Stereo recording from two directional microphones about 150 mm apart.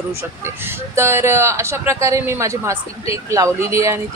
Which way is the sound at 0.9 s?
15° right (ahead or behind).